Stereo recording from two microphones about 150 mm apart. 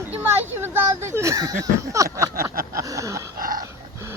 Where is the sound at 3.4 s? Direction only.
70° right (ahead or behind).